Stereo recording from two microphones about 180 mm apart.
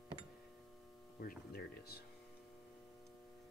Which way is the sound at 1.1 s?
60° left (ahead or behind).